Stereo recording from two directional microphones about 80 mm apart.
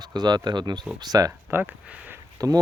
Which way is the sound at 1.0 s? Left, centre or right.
Right.